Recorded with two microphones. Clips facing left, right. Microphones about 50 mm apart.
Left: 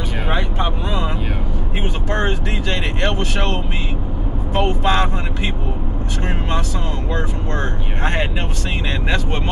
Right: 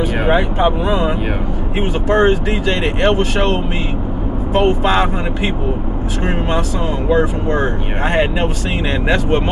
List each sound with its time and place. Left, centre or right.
0.2 s speech: centre
7.1 s speech: centre